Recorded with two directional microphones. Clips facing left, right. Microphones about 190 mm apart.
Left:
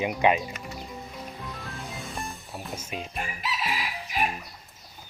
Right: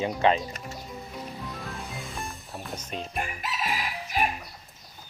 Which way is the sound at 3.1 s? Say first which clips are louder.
Right 1 dB; 50° right (ahead or behind).